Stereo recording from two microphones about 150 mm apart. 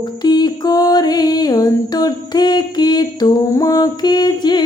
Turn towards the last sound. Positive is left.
turn(degrees=30)  # may be behind; listen again after turning